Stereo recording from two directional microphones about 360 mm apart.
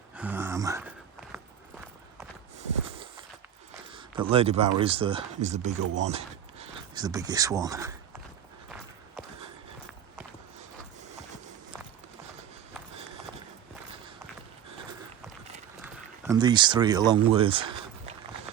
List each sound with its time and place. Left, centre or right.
0.2 s a sound: centre
3.9 s speech: centre
5.8 s speech: right
6.1 s speech: centre
15.8 s speech: centre